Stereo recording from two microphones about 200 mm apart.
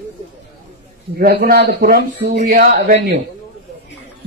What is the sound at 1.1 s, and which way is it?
A man's voice, 50° right (ahead or behind).